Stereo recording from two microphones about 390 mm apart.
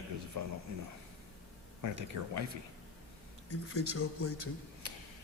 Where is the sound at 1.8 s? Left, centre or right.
Right.